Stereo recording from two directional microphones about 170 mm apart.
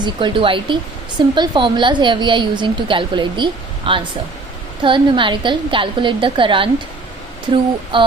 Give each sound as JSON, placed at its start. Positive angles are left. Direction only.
{"t": 0.0, "sound": "a woman's voice", "side_deg": -30}
{"t": 7.9, "sound": "a woman's voice", "side_deg": -30}